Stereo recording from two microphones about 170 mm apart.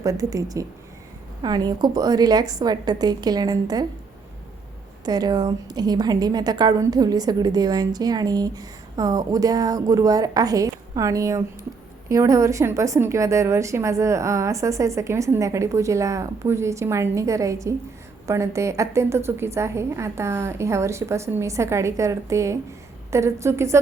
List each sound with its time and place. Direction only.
0.0 s a woman's voice: 20° right (ahead or behind)
5.0 s a woman's voice: 25° right (ahead or behind)